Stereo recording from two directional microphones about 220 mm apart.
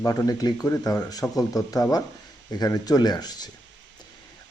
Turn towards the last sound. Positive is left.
turn(degrees=20)  # may be behind; listen again after turning